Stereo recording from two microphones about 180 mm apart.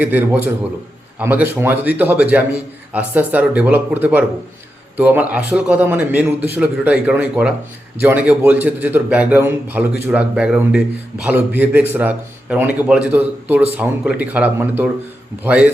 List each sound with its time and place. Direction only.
0.0 s a man's voice: 10° right (ahead or behind)